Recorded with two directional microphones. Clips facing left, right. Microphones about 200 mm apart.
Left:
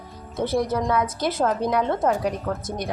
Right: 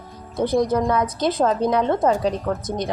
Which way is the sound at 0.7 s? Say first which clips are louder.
Right 3 dB; centre (ahead or behind).